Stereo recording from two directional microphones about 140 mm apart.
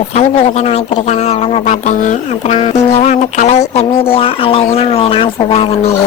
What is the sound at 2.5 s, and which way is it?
Speech, 50° left (ahead or behind).